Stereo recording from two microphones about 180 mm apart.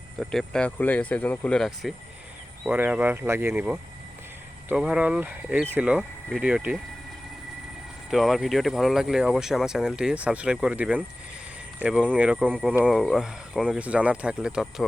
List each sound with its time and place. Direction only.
0.2 s speech: 5° left (ahead or behind)
2.6 s speech: 10° right (ahead or behind)
8.1 s speech: centre (ahead or behind)